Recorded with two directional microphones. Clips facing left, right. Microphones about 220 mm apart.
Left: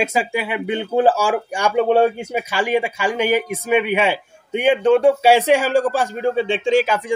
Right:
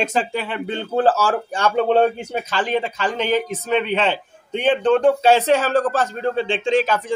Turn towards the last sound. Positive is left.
turn(degrees=10)  # may be behind; listen again after turning